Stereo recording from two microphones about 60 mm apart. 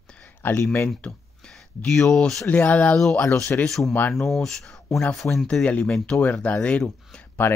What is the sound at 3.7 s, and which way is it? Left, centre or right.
Speech, centre.